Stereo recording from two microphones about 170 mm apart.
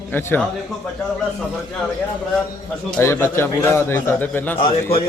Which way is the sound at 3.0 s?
15° left (ahead or behind).